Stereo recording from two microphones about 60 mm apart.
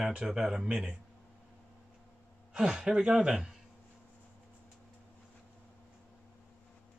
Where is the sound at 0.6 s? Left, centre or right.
Right.